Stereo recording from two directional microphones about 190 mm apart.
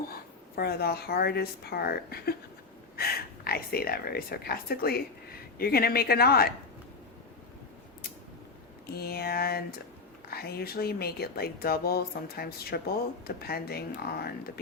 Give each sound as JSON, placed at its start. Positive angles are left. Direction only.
{"t": 0.1, "sound": "speech", "side_deg": 55}
{"t": 8.9, "sound": "speech", "side_deg": 55}